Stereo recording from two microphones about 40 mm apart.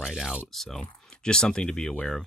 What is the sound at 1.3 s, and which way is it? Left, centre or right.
Speech, left.